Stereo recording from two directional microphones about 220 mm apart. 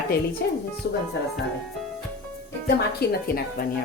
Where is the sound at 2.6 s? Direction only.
45° left (ahead or behind).